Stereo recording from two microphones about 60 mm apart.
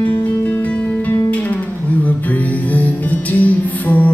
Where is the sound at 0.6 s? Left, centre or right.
Left.